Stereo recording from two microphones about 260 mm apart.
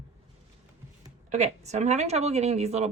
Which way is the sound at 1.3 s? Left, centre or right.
Right.